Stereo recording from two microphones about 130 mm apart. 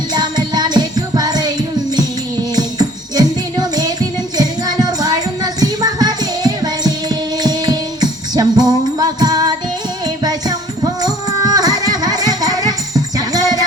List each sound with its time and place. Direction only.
0.1 s music: 35° right (ahead or behind)
2.6 s music: 30° right (ahead or behind)